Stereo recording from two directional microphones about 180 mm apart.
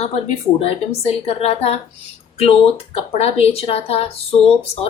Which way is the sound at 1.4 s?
35° left (ahead or behind).